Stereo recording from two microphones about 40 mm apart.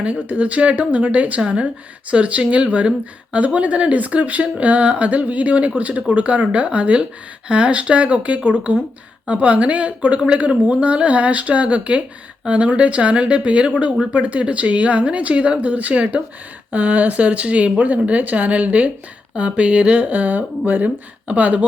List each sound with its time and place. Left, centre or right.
0.0 s speech: right